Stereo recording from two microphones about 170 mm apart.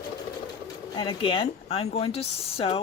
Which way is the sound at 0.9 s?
30° left (ahead or behind).